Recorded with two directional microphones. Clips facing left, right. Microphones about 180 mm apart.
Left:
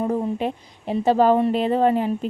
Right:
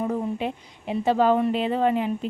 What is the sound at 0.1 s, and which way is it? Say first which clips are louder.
A woman's voice: left 3 dB; 40° left (ahead or behind).